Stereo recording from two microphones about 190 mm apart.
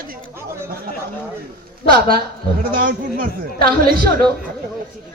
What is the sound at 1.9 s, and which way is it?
Speech, 50° right (ahead or behind).